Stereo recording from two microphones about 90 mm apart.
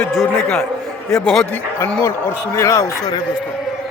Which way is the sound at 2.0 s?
30° left (ahead or behind).